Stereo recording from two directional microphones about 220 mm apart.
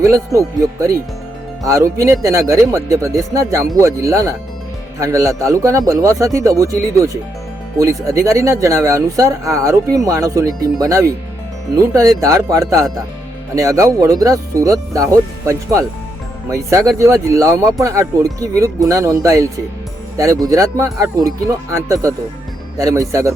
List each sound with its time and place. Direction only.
0.3 s speech: 15° right (ahead or behind)